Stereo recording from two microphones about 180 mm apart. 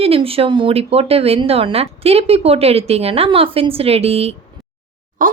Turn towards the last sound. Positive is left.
turn(degrees=-50)  # may be behind; listen again after turning